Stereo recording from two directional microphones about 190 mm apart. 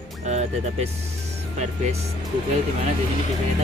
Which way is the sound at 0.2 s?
35° right (ahead or behind).